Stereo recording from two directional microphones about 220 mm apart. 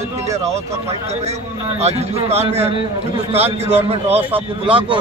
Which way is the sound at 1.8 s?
30° right (ahead or behind).